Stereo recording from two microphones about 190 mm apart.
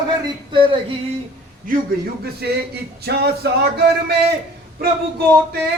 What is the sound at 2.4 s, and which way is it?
Speech, 60° right (ahead or behind).